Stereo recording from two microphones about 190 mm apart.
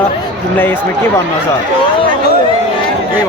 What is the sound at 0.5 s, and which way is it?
Speech, 10° left (ahead or behind).